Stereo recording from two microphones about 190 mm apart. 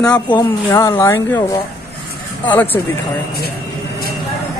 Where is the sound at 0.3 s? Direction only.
20° left (ahead or behind).